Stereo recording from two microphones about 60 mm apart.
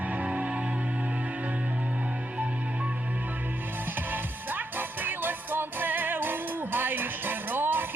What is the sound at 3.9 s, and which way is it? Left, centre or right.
Music, right.